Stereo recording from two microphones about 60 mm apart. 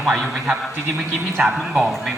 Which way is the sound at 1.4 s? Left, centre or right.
Centre.